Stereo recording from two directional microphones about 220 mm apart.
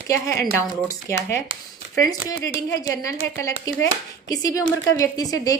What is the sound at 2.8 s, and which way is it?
Speech, 15° left (ahead or behind).